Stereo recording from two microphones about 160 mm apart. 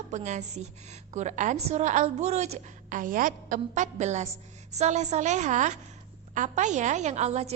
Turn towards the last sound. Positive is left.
turn(degrees=-45)  # may be behind; listen again after turning